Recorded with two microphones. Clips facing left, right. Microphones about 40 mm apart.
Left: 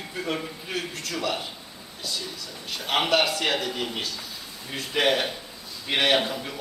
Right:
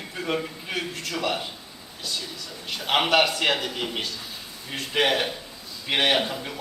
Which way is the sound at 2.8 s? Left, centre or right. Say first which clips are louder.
Right 2 dB; right.